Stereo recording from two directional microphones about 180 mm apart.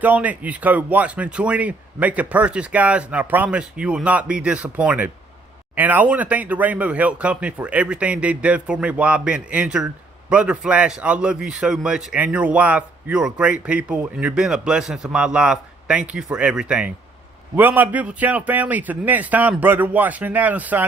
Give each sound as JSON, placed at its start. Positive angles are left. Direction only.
{"t": 0.0, "sound": "a man's voice", "side_deg": -10}